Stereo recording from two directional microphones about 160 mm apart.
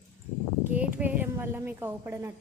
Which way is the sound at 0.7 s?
10° right (ahead or behind).